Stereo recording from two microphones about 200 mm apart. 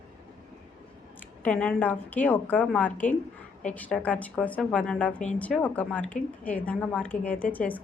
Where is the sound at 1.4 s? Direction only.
5° left (ahead or behind).